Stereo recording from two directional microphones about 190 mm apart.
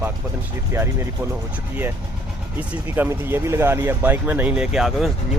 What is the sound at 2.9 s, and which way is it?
Speech, 10° right (ahead or behind).